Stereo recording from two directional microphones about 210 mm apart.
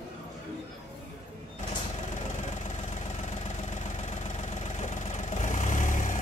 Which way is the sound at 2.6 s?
35° left (ahead or behind).